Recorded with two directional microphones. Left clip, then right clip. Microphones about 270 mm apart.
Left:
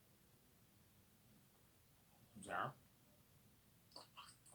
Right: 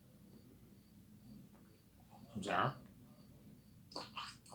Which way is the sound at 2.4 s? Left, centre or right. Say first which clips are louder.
Right 9 dB; centre.